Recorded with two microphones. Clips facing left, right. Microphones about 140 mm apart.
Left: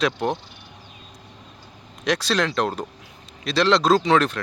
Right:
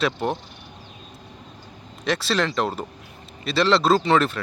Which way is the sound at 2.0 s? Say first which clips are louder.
Left 1 dB; 5° right (ahead or behind).